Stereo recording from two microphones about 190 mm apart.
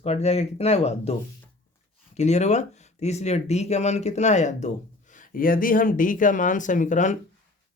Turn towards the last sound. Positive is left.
turn(degrees=40)  # may be behind; listen again after turning